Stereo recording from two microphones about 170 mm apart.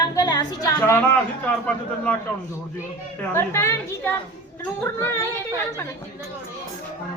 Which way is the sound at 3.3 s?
15° left (ahead or behind).